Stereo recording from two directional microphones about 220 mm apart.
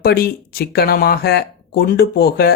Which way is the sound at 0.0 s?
45° left (ahead or behind).